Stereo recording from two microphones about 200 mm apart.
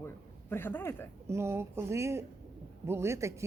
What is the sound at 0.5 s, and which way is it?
Speech, 10° left (ahead or behind).